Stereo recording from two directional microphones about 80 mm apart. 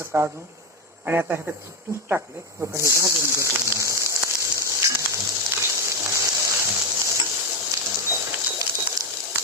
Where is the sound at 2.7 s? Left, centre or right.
Right.